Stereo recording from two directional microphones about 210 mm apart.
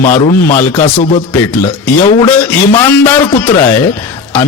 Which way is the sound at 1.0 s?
30° left (ahead or behind).